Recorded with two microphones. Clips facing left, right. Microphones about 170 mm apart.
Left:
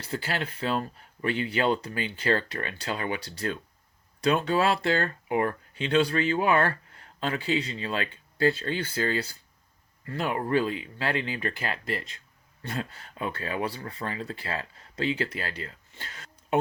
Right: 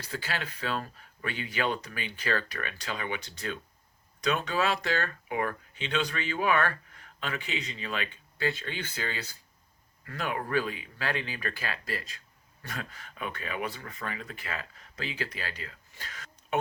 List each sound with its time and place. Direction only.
0.0 s speech: 30° left (ahead or behind)